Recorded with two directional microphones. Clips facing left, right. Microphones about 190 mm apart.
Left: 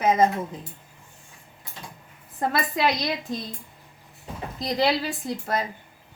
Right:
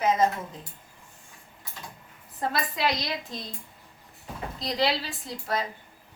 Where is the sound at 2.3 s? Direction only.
50° left (ahead or behind).